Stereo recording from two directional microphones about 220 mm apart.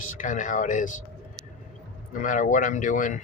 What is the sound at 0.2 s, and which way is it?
Speech, 35° left (ahead or behind).